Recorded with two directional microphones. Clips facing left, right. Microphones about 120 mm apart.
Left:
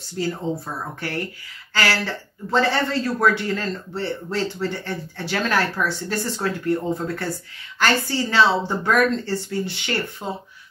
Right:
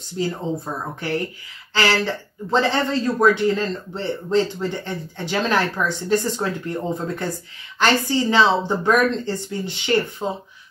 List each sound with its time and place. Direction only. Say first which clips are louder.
0.2 s speech: right 1 dB; 20° right (ahead or behind)
1.7 s a woman's voice: right 3 dB; 20° right (ahead or behind)